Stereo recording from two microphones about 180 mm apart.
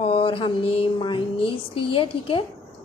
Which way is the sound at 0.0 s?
30° left (ahead or behind).